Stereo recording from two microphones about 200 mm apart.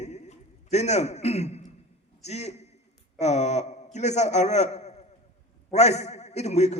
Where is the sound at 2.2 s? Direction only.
35° left (ahead or behind).